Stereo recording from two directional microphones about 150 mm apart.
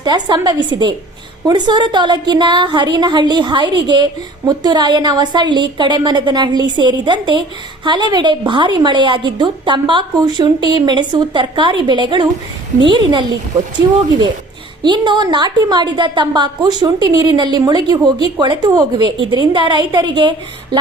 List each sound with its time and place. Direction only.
0.0 s a woman's voice: 30° right (ahead or behind)
14.8 s a woman's voice: 30° right (ahead or behind)